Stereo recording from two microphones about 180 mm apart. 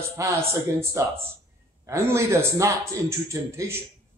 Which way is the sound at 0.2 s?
15° right (ahead or behind).